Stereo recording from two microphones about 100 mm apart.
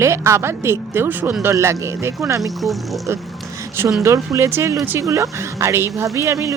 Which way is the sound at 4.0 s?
30° right (ahead or behind).